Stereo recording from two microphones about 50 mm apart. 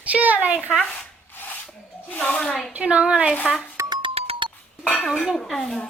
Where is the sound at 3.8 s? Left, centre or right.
Right.